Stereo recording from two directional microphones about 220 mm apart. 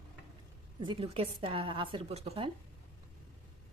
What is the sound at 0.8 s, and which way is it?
Speech, 25° right (ahead or behind).